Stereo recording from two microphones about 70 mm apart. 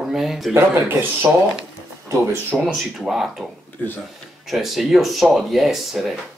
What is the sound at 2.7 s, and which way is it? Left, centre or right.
Speech, centre.